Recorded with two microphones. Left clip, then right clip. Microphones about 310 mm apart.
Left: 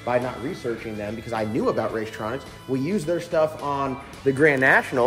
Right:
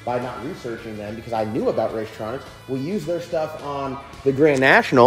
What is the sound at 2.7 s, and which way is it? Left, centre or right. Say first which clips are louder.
Speech: left 1 dB; centre.